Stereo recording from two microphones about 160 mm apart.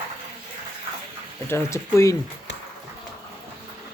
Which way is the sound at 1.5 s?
20° left (ahead or behind).